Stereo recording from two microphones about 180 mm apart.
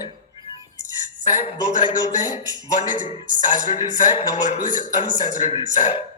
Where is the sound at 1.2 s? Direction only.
40° left (ahead or behind).